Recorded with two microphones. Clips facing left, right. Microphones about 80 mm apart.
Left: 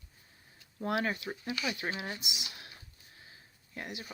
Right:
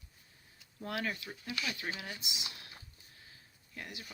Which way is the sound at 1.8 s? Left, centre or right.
Left.